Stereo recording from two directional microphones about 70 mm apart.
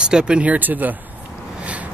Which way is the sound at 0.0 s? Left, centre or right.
Centre.